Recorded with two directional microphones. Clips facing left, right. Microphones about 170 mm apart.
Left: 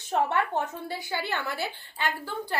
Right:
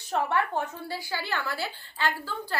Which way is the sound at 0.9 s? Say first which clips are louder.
Left 1 dB; 20° left (ahead or behind).